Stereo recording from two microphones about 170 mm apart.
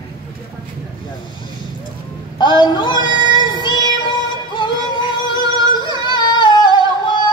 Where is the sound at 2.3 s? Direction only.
25° left (ahead or behind).